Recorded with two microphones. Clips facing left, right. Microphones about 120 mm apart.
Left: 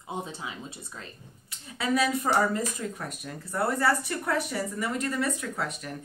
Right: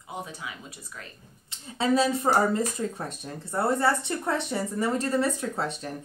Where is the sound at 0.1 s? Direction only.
25° left (ahead or behind).